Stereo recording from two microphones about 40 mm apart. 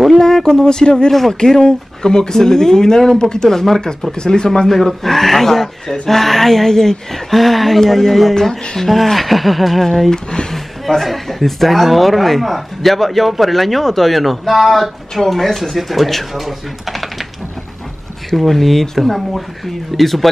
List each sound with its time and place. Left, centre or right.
0.2 s speech: centre
4.1 s speech: centre
4.6 s speech: centre
18.3 s speech: centre